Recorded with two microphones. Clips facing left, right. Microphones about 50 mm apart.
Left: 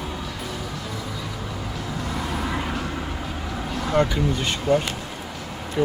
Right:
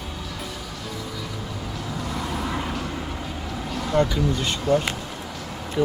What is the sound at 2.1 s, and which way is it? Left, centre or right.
Vehicle, centre.